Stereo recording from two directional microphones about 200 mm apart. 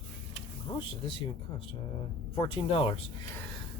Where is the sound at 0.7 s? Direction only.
25° left (ahead or behind).